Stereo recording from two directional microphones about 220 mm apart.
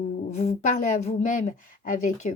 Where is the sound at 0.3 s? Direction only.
30° left (ahead or behind).